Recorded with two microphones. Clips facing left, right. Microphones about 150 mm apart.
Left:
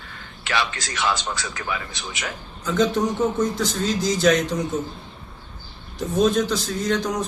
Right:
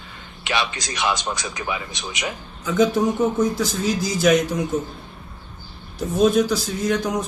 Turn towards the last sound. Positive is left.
turn(degrees=-10)  # may be behind; listen again after turning